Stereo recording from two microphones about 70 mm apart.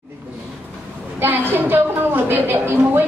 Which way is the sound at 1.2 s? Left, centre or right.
Right.